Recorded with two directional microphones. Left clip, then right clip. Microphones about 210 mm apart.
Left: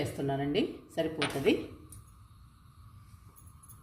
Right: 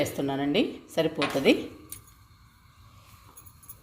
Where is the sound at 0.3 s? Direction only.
35° right (ahead or behind).